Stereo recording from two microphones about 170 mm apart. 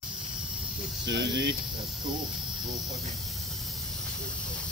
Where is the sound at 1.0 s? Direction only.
90° right.